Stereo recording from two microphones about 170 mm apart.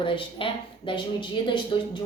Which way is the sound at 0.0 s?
30° left (ahead or behind).